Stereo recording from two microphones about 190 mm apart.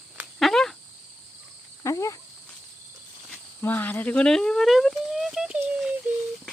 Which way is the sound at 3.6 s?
10° left (ahead or behind).